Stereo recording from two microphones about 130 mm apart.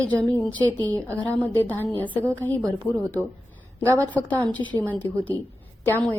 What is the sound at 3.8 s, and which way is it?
Speech, 15° left (ahead or behind).